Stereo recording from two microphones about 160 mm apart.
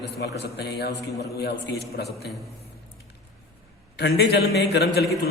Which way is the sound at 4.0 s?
90° left.